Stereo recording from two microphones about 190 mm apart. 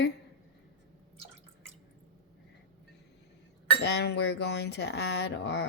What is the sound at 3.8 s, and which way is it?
Speech, 60° left (ahead or behind).